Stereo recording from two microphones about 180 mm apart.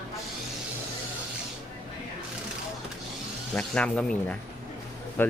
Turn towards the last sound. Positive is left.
turn(degrees=10)  # may be behind; listen again after turning